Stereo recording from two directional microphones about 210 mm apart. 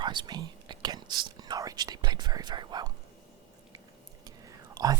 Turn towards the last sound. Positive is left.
turn(degrees=-20)  # may be behind; listen again after turning